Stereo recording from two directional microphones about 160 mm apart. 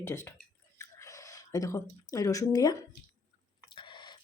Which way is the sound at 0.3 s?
15° left (ahead or behind).